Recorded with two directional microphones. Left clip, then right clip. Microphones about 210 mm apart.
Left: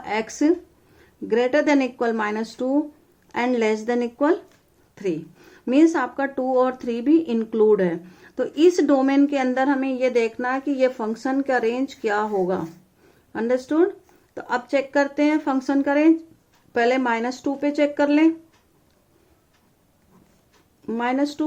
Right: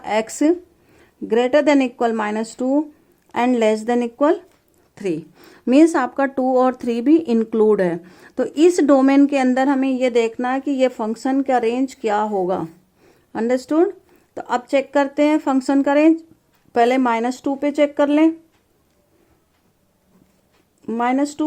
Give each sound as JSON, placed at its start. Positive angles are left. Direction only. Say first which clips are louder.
{"t": 0.0, "sound": "speech", "louder": "right 4 dB", "side_deg": -40}
{"t": 20.8, "sound": "speech", "louder": "right 3 dB", "side_deg": -35}